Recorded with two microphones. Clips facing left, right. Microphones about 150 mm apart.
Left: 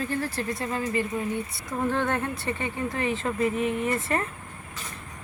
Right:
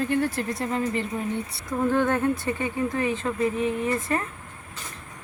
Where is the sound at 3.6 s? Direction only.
30° right (ahead or behind).